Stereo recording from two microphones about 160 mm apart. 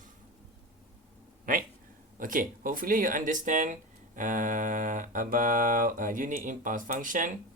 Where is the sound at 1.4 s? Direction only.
60° right (ahead or behind).